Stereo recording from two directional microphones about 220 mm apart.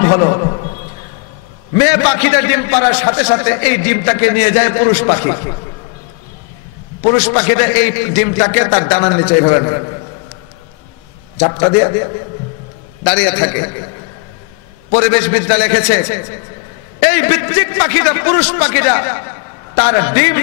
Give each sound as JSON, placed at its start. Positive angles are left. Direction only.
{"t": 0.0, "sound": "a man's voice", "side_deg": 20}
{"t": 1.8, "sound": "a man's voice", "side_deg": 15}
{"t": 7.2, "sound": "a man's voice", "side_deg": 15}
{"t": 11.3, "sound": "a man's voice", "side_deg": 20}
{"t": 13.0, "sound": "a man's voice", "side_deg": 10}
{"t": 15.0, "sound": "a man's voice", "side_deg": 15}